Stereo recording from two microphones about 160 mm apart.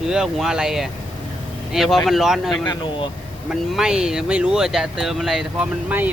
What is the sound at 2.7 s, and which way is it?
Speech, 30° left (ahead or behind).